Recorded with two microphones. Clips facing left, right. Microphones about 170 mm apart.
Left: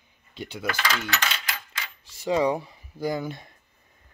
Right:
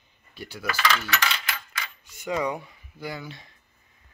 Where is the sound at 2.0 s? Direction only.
30° left (ahead or behind); by 3.5 s 50° left (ahead or behind).